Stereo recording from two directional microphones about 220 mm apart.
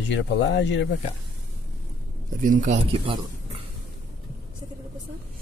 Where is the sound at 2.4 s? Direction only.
35° right (ahead or behind).